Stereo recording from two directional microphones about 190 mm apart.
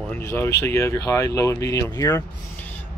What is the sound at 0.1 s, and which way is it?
Speech, 15° left (ahead or behind).